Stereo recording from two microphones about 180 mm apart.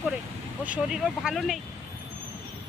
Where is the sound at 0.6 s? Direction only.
5° right (ahead or behind).